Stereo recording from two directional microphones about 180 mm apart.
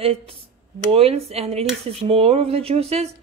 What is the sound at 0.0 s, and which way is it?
Speech, 30° right (ahead or behind).